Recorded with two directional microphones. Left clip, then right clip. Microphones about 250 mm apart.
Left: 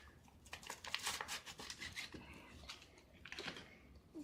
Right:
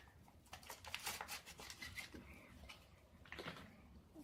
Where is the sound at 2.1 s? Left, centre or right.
Centre.